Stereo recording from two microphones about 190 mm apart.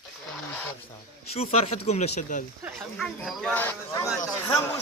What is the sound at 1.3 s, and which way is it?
Speech, 30° left (ahead or behind).